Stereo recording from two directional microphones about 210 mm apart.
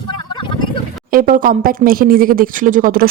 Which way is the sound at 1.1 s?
40° right (ahead or behind).